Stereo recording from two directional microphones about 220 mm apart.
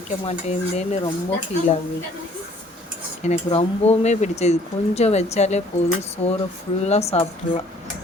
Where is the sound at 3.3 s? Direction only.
30° left (ahead or behind).